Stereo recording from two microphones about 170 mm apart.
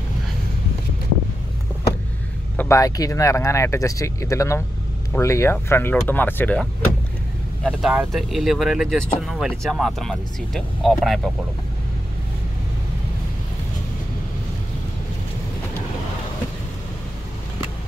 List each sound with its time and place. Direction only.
2.5 s speech: 15° left (ahead or behind)
7.6 s speech: 5° right (ahead or behind)